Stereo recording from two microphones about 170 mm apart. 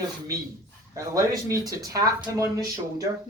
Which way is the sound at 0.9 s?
20° right (ahead or behind).